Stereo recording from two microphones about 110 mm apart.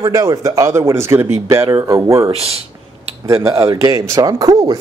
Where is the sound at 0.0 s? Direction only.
35° right (ahead or behind).